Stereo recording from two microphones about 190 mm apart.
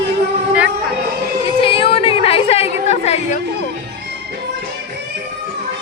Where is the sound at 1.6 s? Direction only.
30° left (ahead or behind).